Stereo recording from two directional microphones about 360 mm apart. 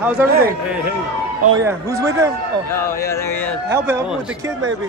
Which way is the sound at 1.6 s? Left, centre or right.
Centre.